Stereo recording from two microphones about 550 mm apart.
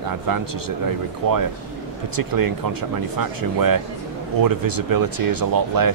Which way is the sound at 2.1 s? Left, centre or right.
Right.